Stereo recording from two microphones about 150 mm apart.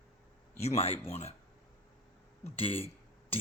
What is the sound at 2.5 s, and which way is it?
Speech, 40° left (ahead or behind).